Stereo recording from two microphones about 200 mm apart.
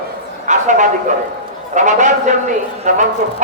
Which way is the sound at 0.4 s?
40° right (ahead or behind).